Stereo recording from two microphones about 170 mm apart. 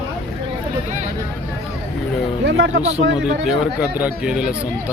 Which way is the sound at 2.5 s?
90° right.